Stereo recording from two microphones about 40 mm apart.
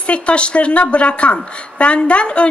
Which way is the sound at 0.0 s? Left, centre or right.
Left.